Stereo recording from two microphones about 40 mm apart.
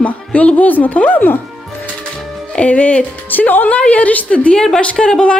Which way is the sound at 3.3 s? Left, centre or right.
Left.